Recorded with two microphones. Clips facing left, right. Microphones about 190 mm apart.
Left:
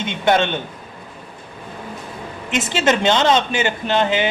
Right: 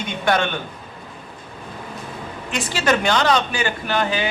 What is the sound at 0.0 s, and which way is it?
Speech, 25° left (ahead or behind).